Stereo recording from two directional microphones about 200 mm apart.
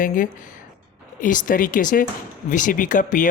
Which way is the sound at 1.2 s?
40° left (ahead or behind).